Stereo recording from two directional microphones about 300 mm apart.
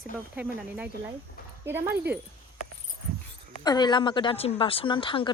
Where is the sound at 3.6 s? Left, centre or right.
Centre.